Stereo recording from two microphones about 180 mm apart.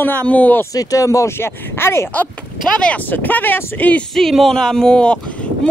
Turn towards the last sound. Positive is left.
turn(degrees=5)  # may be behind; listen again after turning